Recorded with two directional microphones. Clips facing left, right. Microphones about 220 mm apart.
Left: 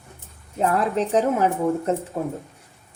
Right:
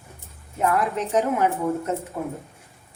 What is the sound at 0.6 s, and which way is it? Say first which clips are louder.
A woman's voice: left 2 dB; 30° left (ahead or behind).